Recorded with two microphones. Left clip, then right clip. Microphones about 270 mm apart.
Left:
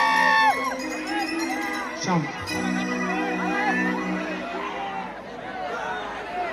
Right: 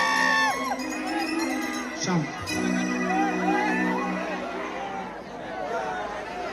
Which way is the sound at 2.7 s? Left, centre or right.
Centre.